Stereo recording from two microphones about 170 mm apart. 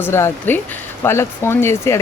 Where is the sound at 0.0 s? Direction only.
15° left (ahead or behind).